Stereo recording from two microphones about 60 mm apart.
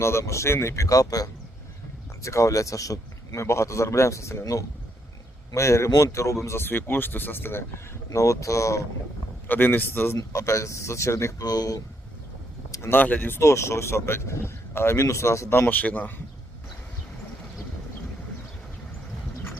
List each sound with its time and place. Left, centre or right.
0.0 s speech: left
2.2 s speech: left
5.5 s speech: left
6.6 s speech: left
8.1 s speech: left
9.5 s speech: left
10.2 s speech: left
11.4 s speech: left
12.9 s speech: left
13.4 s speech: left
15.7 s speech: left